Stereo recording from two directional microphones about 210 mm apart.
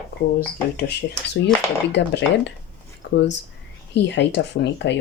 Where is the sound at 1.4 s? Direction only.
55° left (ahead or behind).